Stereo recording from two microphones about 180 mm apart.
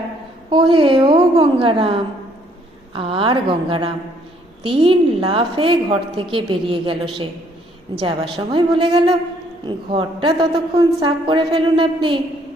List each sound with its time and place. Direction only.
0.5 s a woman's voice: 30° right (ahead or behind)
8.0 s a woman's voice: 25° right (ahead or behind)